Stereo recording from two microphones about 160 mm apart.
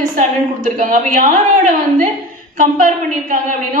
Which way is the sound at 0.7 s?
55° right (ahead or behind).